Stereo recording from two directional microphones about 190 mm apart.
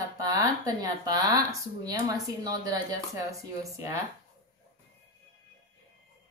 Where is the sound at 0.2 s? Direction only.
20° right (ahead or behind).